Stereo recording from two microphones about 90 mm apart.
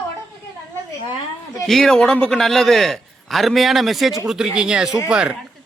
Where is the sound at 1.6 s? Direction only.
5° left (ahead or behind); by 5.4 s 10° right (ahead or behind).